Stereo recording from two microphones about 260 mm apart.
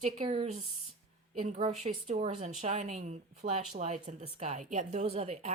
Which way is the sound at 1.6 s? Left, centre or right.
Right.